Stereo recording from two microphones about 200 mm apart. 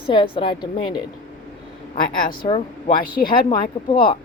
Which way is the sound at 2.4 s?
25° left (ahead or behind).